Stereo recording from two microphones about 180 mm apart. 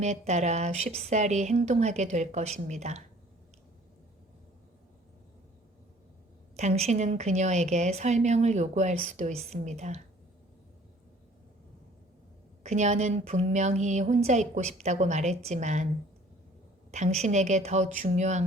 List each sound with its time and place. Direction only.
0.0 s speech: 40° right (ahead or behind)
6.6 s speech: 40° right (ahead or behind)
12.6 s speech: 40° right (ahead or behind)
16.9 s speech: 40° right (ahead or behind)